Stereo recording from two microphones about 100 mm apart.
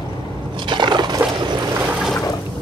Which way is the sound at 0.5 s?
50° right (ahead or behind).